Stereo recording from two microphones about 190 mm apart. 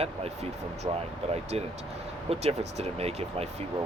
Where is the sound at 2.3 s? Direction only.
35° right (ahead or behind).